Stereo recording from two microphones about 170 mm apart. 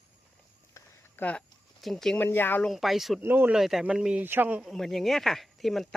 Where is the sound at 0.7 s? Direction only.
10° left (ahead or behind).